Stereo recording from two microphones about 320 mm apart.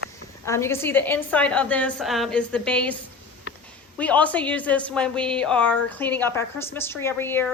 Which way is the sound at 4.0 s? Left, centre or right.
Centre.